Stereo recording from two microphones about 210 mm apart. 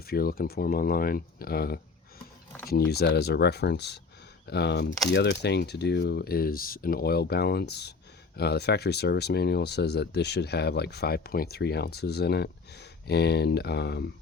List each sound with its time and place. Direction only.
0.0 s speech: 45° left (ahead or behind)